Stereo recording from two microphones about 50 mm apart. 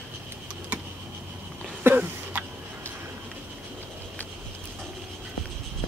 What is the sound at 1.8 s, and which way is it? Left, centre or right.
Cough, right.